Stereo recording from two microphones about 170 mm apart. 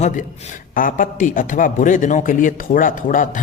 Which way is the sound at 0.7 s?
55° left (ahead or behind).